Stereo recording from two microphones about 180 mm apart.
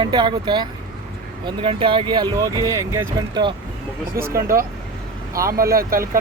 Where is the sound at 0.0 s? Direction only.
25° right (ahead or behind).